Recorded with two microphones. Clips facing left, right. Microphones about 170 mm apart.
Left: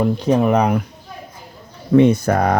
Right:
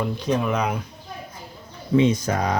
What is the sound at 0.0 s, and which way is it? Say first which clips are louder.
Speech: left 7 dB; 55° left (ahead or behind).